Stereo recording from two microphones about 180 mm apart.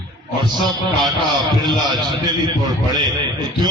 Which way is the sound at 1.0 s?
25° right (ahead or behind).